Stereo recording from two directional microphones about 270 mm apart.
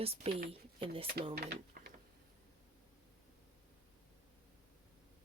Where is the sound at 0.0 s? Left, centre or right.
Right.